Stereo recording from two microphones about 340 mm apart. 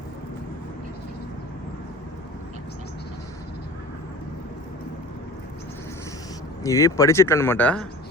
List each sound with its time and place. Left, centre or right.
6.6 s speech: centre